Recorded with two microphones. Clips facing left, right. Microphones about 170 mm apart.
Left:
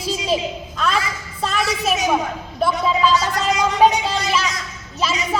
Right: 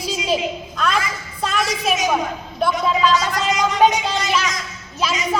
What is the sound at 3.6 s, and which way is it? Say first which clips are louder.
Music: left 1 dB; 30° left (ahead or behind).